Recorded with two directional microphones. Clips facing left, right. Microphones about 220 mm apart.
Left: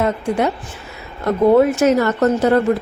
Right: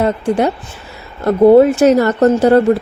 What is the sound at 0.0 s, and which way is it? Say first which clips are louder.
Speech: right 4 dB; 30° right (ahead or behind).